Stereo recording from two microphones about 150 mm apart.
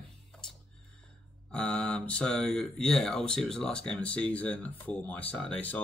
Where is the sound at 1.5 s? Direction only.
10° left (ahead or behind).